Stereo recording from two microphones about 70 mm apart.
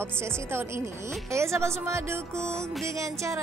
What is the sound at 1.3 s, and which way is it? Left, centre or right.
Speech, right.